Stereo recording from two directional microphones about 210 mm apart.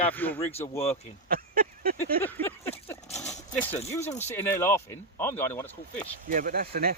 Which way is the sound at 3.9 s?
10° left (ahead or behind).